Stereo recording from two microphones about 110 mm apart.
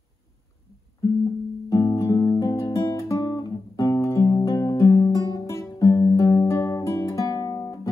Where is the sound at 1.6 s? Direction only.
35° left (ahead or behind).